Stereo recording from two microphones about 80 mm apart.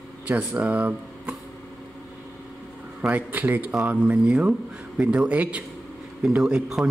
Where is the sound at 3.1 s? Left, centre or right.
Right.